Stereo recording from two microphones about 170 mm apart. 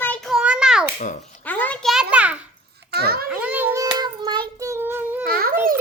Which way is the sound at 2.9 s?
65° right (ahead or behind).